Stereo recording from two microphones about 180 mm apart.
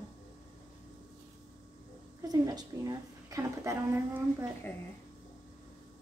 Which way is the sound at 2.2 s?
20° right (ahead or behind).